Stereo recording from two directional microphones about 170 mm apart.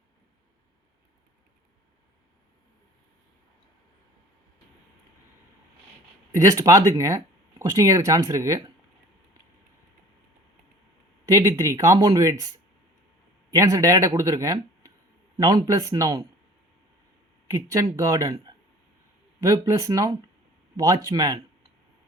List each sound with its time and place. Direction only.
6.3 s speech: 20° right (ahead or behind)
11.3 s speech: 15° right (ahead or behind)
13.6 s speech: 15° right (ahead or behind)
17.9 s speech: 15° right (ahead or behind)
19.4 s speech: 20° right (ahead or behind)